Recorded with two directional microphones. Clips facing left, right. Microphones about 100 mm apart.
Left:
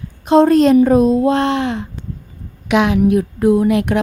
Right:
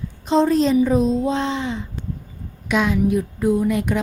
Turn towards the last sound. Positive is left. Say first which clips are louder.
# left 6 dB
turn(degrees=70)  # may be behind; listen again after turning